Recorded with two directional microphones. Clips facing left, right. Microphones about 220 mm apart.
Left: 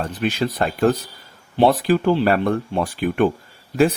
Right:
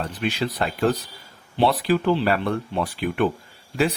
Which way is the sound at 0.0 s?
45° left (ahead or behind).